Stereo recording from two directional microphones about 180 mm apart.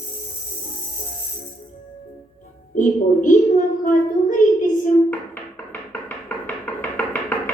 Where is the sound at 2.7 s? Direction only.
45° left (ahead or behind).